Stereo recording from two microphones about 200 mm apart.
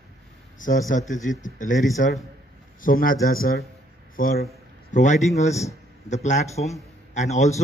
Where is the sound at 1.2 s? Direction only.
40° left (ahead or behind).